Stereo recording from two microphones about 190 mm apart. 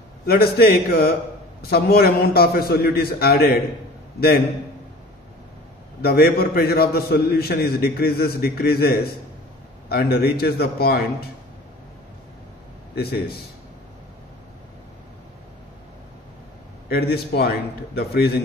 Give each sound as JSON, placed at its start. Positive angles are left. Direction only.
{"t": 0.3, "sound": "a man's voice", "side_deg": 55}
{"t": 6.0, "sound": "a man's voice", "side_deg": 55}
{"t": 12.9, "sound": "a man's voice", "side_deg": 55}
{"t": 16.9, "sound": "a man's voice", "side_deg": 55}